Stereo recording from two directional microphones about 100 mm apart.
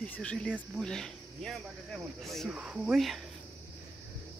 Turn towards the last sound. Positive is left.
turn(degrees=0)  # may be behind; listen again after turning